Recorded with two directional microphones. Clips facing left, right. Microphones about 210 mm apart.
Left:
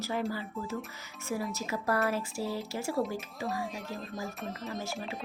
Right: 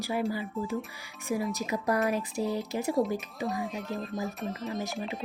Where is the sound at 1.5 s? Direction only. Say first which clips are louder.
Right 3 dB; 15° right (ahead or behind).